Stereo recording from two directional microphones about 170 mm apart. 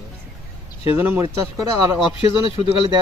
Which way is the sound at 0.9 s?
15° right (ahead or behind).